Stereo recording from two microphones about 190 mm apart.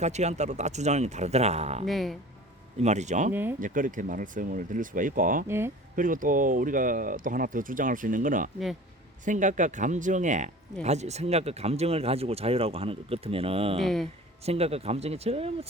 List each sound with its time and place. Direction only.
0.0 s speech: 35° right (ahead or behind)
1.9 s speech: centre (ahead or behind)
2.8 s speech: 35° right (ahead or behind)
5.5 s speech: 10° right (ahead or behind)
6.0 s speech: 45° right (ahead or behind); by 13.7 s 30° right (ahead or behind)
13.8 s speech: centre (ahead or behind)
14.4 s speech: 30° right (ahead or behind)